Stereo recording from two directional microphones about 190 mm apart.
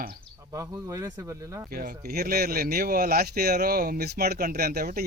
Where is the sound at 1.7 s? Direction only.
50° right (ahead or behind).